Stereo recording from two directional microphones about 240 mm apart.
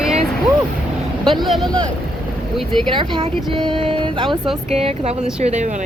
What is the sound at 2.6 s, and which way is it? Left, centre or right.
Speech, centre.